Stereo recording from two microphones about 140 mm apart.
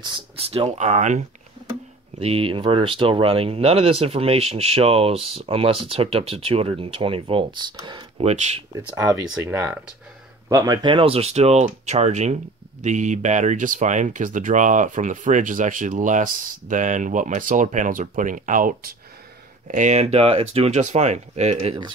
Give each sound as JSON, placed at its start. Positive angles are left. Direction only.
{"t": 0.0, "sound": "speech", "side_deg": -40}
{"t": 2.1, "sound": "speech", "side_deg": -45}
{"t": 8.2, "sound": "speech", "side_deg": -45}
{"t": 8.7, "sound": "speech", "side_deg": -20}
{"t": 19.7, "sound": "speech", "side_deg": -60}